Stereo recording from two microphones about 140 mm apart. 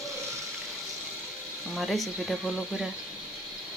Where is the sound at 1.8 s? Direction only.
Centre (ahead or behind).